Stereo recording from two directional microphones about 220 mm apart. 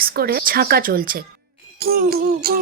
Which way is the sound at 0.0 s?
45° right (ahead or behind).